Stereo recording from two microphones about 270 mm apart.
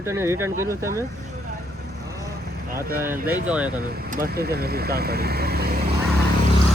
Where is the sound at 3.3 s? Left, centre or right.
Centre.